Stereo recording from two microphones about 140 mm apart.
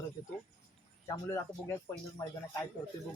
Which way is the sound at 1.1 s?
20° left (ahead or behind).